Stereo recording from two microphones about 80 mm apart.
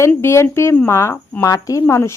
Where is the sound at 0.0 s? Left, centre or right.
Left.